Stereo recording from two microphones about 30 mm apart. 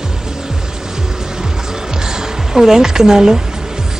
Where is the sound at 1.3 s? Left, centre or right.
Centre.